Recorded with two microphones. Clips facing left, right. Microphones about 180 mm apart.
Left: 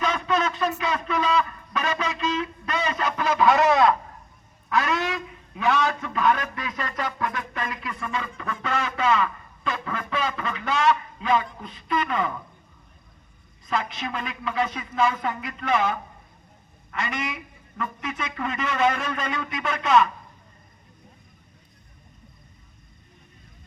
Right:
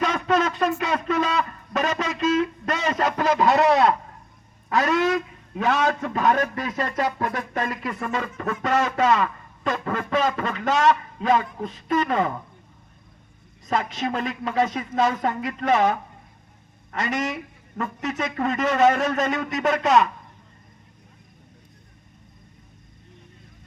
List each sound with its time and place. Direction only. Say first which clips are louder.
0.0 s a sound: right 3 dB; 45° right (ahead or behind)
5.5 s a man's voice: right 1 dB; 40° right (ahead or behind)
13.7 s a man's voice: right 4 dB; 40° right (ahead or behind)